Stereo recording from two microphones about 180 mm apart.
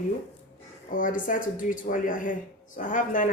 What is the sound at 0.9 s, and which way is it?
Speech, 45° left (ahead or behind).